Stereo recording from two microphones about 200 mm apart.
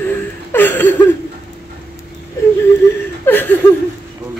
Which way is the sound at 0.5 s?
10° left (ahead or behind).